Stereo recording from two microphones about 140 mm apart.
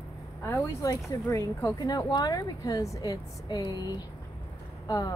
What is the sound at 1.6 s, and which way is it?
Speech, 25° left (ahead or behind).